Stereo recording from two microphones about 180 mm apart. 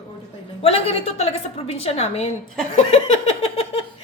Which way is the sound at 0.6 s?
30° left (ahead or behind).